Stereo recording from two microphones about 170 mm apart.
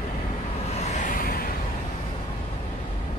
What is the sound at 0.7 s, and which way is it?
Vehicle, 45° left (ahead or behind).